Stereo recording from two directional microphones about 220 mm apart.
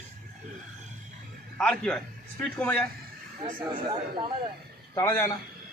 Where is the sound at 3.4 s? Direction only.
20° right (ahead or behind).